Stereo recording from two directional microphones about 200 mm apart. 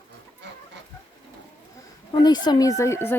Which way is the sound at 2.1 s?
20° left (ahead or behind).